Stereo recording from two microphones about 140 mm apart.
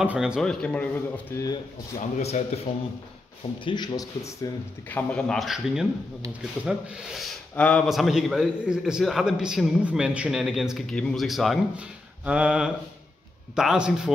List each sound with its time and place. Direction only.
0.0 s a man's voice: 10° right (ahead or behind); by 1.2 s 10° left (ahead or behind)
1.3 s speech: 25° left (ahead or behind)
2.0 s a man's voice: 55° left (ahead or behind)
3.6 s speech: 30° left (ahead or behind)
4.4 s a man's voice: 15° left (ahead or behind); by 7.3 s centre (ahead or behind)
7.5 s a man's voice: 10° left (ahead or behind)
12.3 s a sound: 10° right (ahead or behind)
13.6 s a man's voice: 5° right (ahead or behind)